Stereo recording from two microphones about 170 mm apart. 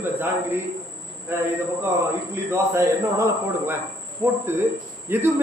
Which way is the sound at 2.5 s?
15° right (ahead or behind).